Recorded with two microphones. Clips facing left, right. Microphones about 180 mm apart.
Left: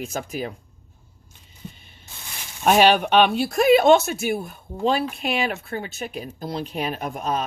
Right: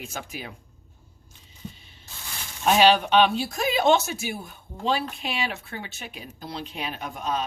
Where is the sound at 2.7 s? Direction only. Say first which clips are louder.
Left 2 dB; 55° left (ahead or behind).